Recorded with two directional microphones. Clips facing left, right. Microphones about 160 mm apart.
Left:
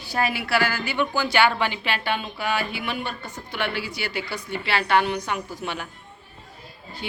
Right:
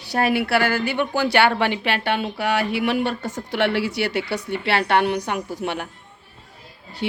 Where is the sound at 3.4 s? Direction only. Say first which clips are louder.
Right 7 dB; 75° right (ahead or behind); by 5.8 s 60° right (ahead or behind).